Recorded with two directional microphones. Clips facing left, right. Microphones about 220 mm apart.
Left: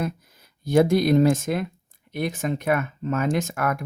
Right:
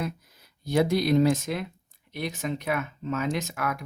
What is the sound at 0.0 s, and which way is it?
Speech, 50° left (ahead or behind).